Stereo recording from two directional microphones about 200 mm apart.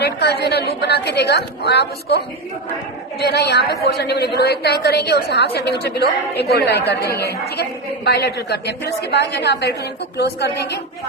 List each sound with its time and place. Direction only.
0.0 s a woman's voice: 55° left (ahead or behind)